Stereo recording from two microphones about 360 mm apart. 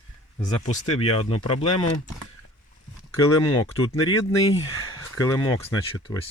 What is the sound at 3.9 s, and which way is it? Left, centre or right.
Speech, centre.